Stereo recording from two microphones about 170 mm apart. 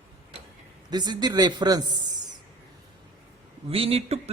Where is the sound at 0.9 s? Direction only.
25° right (ahead or behind).